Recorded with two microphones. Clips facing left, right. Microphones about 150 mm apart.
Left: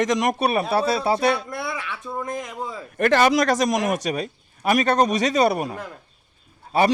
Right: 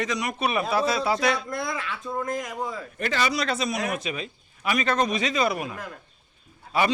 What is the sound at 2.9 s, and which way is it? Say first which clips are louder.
A man's voice: left 10 dB; 55° left (ahead or behind).